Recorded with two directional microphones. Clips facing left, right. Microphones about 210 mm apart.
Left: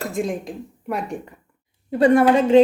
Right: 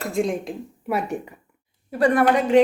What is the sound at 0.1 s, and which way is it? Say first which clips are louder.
Speech: right 2 dB; centre (ahead or behind).